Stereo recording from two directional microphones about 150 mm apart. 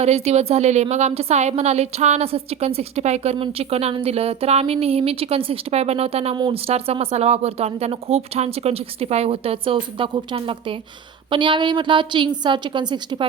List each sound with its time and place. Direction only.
0.0 s a woman's voice: 45° right (ahead or behind)
6.3 s a woman's voice: 30° right (ahead or behind)
6.7 s speech: 40° right (ahead or behind)